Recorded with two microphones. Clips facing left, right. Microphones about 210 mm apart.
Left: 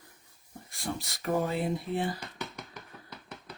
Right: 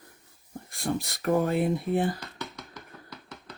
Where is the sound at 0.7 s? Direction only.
55° right (ahead or behind).